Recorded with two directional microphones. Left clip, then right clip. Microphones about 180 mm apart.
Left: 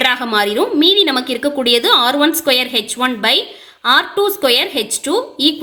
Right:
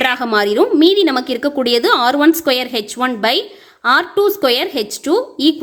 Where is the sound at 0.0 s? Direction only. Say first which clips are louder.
Even; 45° right (ahead or behind).